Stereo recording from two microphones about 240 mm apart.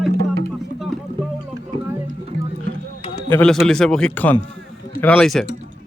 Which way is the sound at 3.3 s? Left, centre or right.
Centre.